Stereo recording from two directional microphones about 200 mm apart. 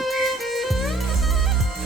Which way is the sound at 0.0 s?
Centre (ahead or behind).